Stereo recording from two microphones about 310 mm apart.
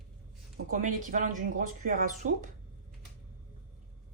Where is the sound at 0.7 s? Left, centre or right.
Right.